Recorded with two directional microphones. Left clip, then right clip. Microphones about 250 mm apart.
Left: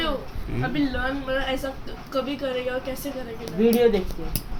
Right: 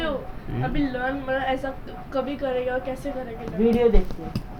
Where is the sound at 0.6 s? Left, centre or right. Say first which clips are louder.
Even; left.